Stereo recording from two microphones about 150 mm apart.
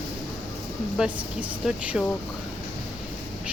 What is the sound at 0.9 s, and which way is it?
Speech, 5° right (ahead or behind).